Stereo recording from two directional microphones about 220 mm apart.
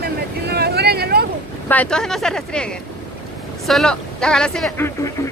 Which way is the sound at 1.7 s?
5° left (ahead or behind).